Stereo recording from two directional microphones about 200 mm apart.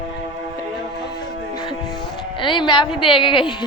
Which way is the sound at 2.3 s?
25° left (ahead or behind).